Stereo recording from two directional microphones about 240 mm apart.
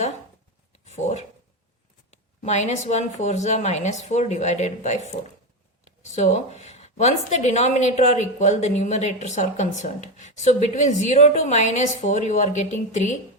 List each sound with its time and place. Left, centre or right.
0.9 s speech: left
2.4 s a woman's voice: left